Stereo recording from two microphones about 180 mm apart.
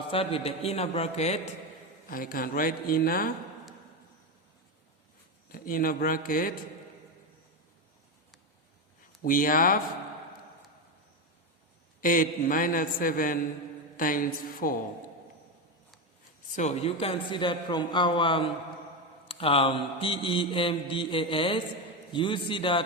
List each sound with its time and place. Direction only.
0.1 s a man's voice: 30° left (ahead or behind)
2.0 s a man's voice: 50° left (ahead or behind)
5.5 s a man's voice: 55° left (ahead or behind)
9.2 s a man's voice: 50° left (ahead or behind)
11.9 s a man's voice: 50° left (ahead or behind)
16.6 s mantra: 35° left (ahead or behind)